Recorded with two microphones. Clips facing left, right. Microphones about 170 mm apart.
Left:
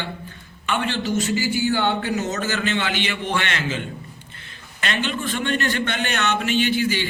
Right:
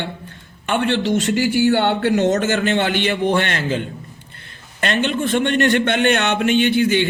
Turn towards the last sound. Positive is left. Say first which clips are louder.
# right 6 dB
turn(degrees=-60)  # may be behind; listen again after turning